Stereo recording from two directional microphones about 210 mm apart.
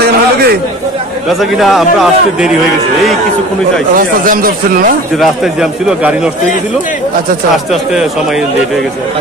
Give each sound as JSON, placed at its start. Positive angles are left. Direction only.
{"t": 0.0, "sound": "a sound", "side_deg": -50}
{"t": 1.4, "sound": "a man's voice", "side_deg": 0}
{"t": 3.9, "sound": "speech", "side_deg": -40}
{"t": 5.2, "sound": "a man's voice", "side_deg": 0}
{"t": 7.5, "sound": "a man's voice", "side_deg": 0}